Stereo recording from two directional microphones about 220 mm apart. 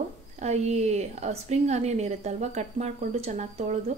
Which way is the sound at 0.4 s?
30° right (ahead or behind).